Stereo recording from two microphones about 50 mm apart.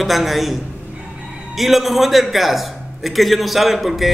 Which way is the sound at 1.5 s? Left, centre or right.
Centre.